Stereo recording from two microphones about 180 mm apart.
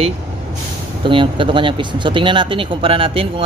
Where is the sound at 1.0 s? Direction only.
25° right (ahead or behind).